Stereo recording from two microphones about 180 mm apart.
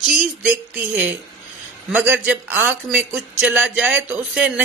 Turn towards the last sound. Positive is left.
turn(degrees=-5)  # may be behind; listen again after turning